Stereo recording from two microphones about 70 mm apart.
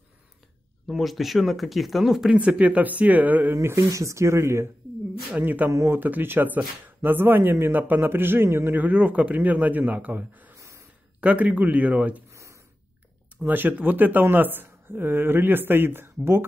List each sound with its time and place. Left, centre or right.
0.8 s speech: centre
2.3 s speech: centre
3.6 s speech: right
5.4 s speech: right
5.7 s speech: right
5.9 s speech: right
8.7 s speech: right
12.3 s gasp: right
13.4 s speech: right